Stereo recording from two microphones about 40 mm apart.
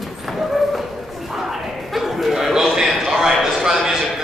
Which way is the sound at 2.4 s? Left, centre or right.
Centre.